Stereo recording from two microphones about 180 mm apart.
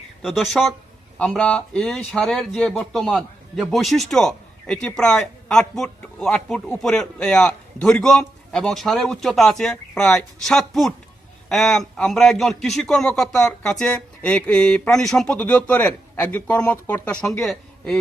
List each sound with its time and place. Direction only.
0.2 s speech: centre (ahead or behind)